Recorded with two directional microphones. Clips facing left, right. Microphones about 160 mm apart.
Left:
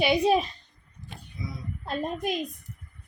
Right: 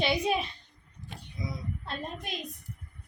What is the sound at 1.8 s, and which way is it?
Speech, 40° left (ahead or behind).